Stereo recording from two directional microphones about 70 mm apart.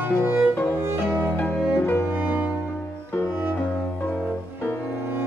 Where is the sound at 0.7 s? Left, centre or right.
Right.